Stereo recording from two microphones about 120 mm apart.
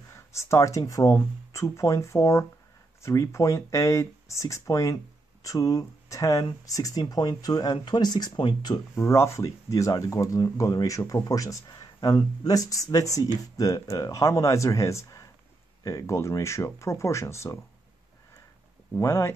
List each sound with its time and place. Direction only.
0.1 s speech: 25° left (ahead or behind)
8.9 s speech: 20° left (ahead or behind)
18.9 s speech: 25° left (ahead or behind)